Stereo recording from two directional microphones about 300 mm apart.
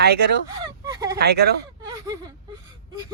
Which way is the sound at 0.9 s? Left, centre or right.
Centre.